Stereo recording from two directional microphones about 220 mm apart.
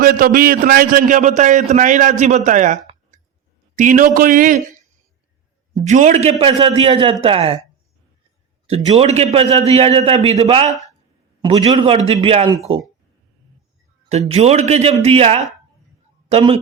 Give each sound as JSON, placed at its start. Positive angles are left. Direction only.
{"t": 0.0, "sound": "a man's voice", "side_deg": -40}
{"t": 8.6, "sound": "a man's voice", "side_deg": -25}
{"t": 14.1, "sound": "a man's voice", "side_deg": -30}